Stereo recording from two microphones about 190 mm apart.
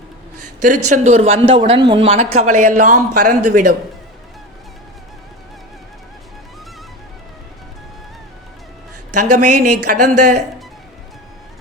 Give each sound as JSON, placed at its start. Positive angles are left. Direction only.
{"t": 0.6, "sound": "speech", "side_deg": -40}
{"t": 9.1, "sound": "speech", "side_deg": -40}